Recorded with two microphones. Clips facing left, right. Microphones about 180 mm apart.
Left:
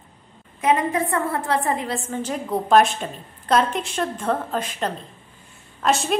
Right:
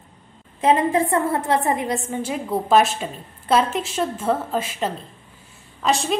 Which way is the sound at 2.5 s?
Centre (ahead or behind).